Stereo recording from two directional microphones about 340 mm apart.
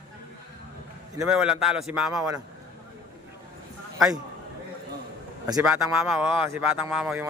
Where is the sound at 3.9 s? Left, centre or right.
Centre.